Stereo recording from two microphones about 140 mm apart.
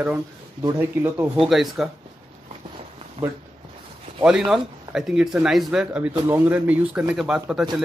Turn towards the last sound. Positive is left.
turn(degrees=-5)  # may be behind; listen again after turning